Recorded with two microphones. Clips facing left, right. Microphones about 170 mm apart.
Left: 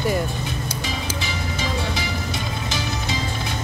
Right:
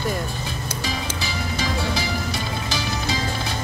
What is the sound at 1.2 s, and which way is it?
Music, 20° left (ahead or behind).